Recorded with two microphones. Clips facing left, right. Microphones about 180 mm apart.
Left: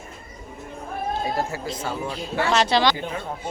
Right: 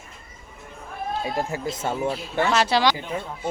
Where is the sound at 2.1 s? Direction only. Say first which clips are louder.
Left 4 dB; 5° right (ahead or behind).